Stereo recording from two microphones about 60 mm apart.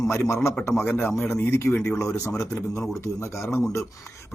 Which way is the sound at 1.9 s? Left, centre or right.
Left.